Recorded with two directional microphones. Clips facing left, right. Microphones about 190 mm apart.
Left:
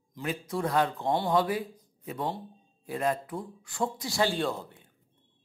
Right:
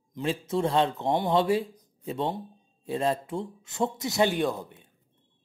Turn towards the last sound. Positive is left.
turn(degrees=-15)  # may be behind; listen again after turning